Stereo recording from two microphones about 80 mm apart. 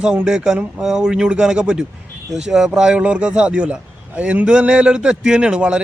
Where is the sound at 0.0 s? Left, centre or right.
Centre.